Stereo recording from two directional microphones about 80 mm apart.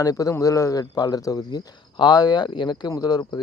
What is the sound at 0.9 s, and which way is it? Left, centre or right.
Speech, left.